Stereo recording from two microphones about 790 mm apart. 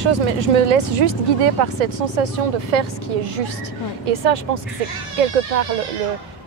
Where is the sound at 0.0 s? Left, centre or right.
Right.